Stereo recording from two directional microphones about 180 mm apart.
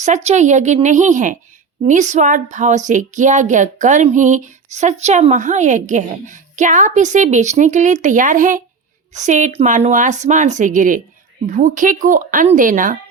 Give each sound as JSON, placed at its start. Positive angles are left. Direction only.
{"t": 0.0, "sound": "a woman's voice", "side_deg": -40}